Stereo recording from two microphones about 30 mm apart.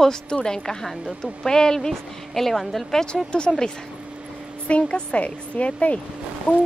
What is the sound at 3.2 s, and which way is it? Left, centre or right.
Speech, left.